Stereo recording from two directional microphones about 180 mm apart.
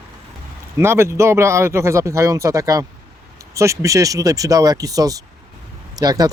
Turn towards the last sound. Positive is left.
turn(degrees=-20)  # may be behind; listen again after turning